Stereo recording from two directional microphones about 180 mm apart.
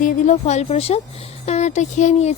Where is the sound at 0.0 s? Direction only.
40° left (ahead or behind).